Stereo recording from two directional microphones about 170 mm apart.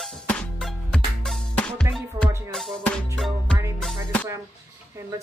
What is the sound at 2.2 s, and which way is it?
Music, 15° right (ahead or behind).